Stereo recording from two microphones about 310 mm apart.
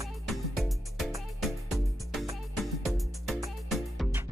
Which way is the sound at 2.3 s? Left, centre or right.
Centre.